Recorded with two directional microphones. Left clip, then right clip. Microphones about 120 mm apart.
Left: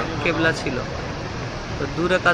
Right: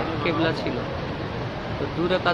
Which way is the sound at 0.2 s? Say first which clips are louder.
Left 4 dB; 20° left (ahead or behind).